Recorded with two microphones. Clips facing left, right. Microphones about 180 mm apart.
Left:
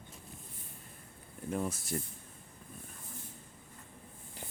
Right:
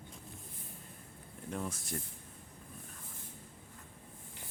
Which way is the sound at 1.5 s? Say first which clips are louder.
Left 4 dB; 5° left (ahead or behind).